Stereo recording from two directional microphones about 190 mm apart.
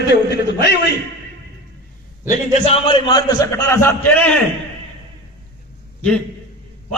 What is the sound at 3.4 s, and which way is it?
Speech, 15° left (ahead or behind).